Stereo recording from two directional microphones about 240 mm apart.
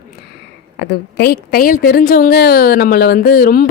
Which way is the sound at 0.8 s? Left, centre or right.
Left.